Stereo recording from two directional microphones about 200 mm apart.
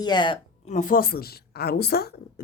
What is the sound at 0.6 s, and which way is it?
A woman's voice, 40° left (ahead or behind).